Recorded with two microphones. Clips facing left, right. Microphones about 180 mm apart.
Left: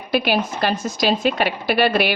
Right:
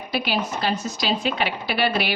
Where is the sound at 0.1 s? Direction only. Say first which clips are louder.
Left 5 dB; 55° left (ahead or behind).